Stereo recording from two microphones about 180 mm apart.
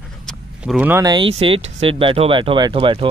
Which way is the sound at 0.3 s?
5° right (ahead or behind).